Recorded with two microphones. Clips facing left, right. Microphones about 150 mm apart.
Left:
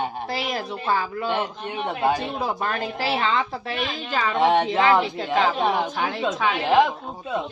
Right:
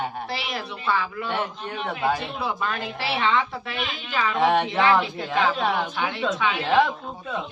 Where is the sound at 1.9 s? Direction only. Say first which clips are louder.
Left 2 dB; 15° left (ahead or behind).